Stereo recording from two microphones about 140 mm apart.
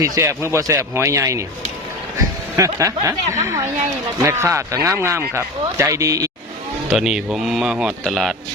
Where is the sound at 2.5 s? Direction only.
20° right (ahead or behind).